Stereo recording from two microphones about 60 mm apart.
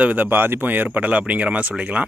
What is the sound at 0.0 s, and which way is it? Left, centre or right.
Speech, right.